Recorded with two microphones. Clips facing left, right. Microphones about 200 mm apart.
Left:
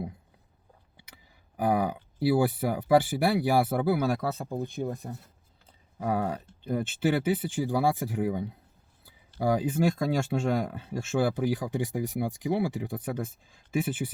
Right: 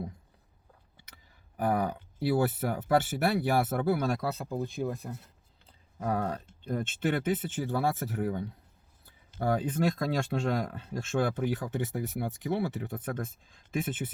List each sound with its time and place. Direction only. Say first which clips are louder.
1.8 s speech: left 3 dB; 10° left (ahead or behind)
4.4 s speech: left 1 dB; 20° left (ahead or behind)
6.0 s speech: left 2 dB; 5° left (ahead or behind)